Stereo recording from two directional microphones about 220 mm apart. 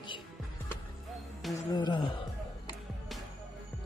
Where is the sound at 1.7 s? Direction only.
20° left (ahead or behind).